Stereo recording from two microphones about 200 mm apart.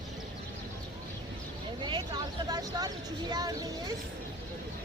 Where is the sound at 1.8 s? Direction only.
20° right (ahead or behind).